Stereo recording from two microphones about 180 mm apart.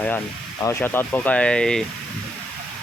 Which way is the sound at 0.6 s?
10° left (ahead or behind).